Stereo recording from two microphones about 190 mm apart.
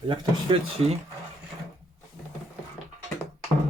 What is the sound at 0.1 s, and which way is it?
Speech, 25° right (ahead or behind).